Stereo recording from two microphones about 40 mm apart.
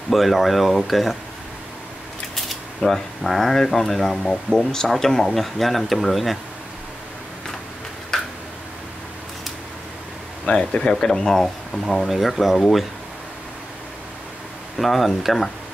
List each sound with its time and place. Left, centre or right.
0.1 s speech: centre
2.3 s speech: centre
8.1 s a sound: centre
10.4 s speech: left
12.1 s speech: centre
14.8 s speech: centre